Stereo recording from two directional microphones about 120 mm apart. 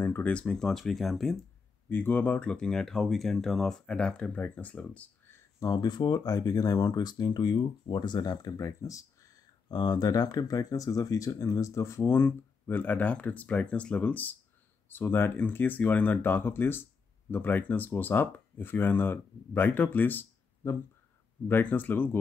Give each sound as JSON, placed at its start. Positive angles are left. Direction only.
{"t": 0.0, "sound": "speech", "side_deg": 15}
{"t": 1.9, "sound": "speech", "side_deg": 15}
{"t": 5.6, "sound": "speech", "side_deg": 35}